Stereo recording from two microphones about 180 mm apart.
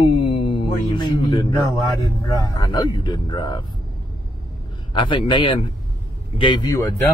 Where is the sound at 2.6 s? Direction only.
20° left (ahead or behind).